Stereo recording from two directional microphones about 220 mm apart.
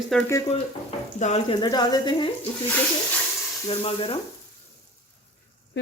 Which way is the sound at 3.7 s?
25° left (ahead or behind).